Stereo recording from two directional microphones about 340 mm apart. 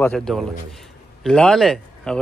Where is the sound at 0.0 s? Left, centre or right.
Centre.